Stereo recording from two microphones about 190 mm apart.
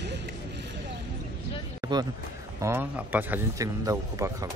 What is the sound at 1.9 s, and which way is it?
Speech, 25° right (ahead or behind).